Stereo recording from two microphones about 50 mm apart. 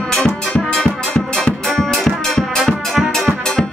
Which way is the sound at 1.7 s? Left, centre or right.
Centre.